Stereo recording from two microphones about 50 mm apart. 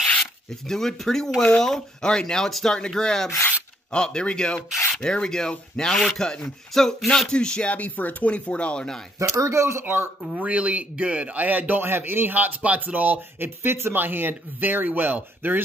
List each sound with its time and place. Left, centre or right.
0.2 s speech: centre
7.2 s speech: centre
7.7 s speech: left
9.3 s speech: right
10.3 s speech: right
13.4 s speech: right